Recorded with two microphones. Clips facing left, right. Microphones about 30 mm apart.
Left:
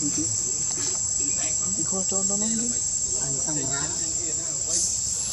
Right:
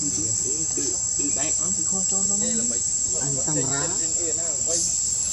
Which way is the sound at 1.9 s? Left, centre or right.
Centre.